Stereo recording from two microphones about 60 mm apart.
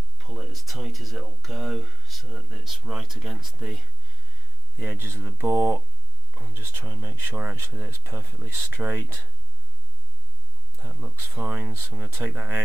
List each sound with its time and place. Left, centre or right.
0.2 s speech: centre
4.7 s speech: right
5.5 s speech: right
10.9 s speech: right